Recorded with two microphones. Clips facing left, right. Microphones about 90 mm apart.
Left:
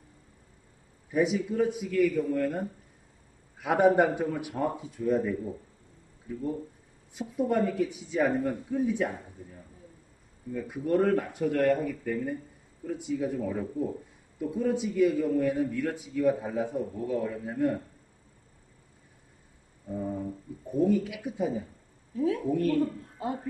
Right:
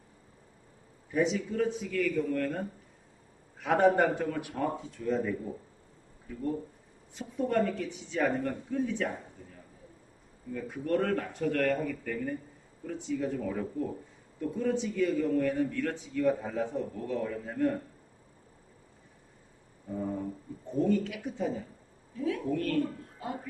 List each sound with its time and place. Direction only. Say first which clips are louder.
1.1 s a man's voice: left 2 dB; 5° left (ahead or behind)
3.6 s a man's voice: left 2 dB; 5° left (ahead or behind)
7.2 s a man's voice: left 2 dB; 10° left (ahead or behind)
10.5 s a man's voice: left 3 dB; 10° left (ahead or behind)
20.0 s a sound: left 1 dB; 5° left (ahead or behind)
20.7 s a man's voice: left 2 dB; 10° left (ahead or behind)
22.1 s a woman's voice: left 4 dB; 30° left (ahead or behind)
22.5 s a man's voice: left 3 dB; 15° left (ahead or behind)
23.1 s speech: left 5 dB; 30° left (ahead or behind)